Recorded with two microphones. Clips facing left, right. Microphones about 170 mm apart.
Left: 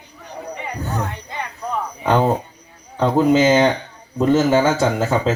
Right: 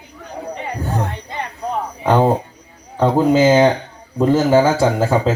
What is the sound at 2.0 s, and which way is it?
A man's voice, 10° right (ahead or behind).